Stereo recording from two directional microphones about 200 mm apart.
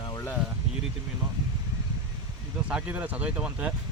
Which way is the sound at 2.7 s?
5° right (ahead or behind).